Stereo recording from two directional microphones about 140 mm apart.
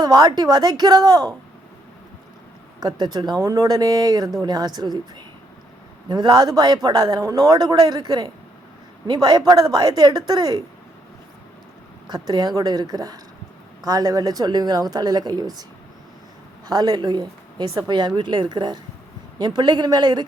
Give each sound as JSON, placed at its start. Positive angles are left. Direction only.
{"t": 0.0, "sound": "a man's voice", "side_deg": -30}
{"t": 2.8, "sound": "a man's voice", "side_deg": -30}
{"t": 6.1, "sound": "a man's voice", "side_deg": -30}
{"t": 12.3, "sound": "a man's voice", "side_deg": -30}
{"t": 16.6, "sound": "speech", "side_deg": -30}